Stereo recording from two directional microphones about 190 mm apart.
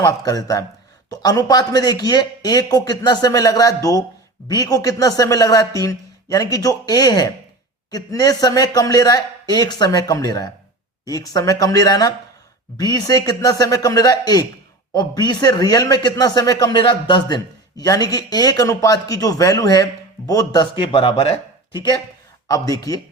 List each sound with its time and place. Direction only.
0.0 s a man's voice: 20° left (ahead or behind)